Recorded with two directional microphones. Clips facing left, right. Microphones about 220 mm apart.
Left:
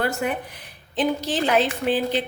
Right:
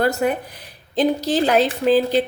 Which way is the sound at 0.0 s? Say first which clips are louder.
Right 5 dB; 40° right (ahead or behind).